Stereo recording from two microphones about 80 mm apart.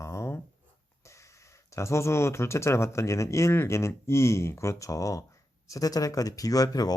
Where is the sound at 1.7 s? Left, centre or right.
Left.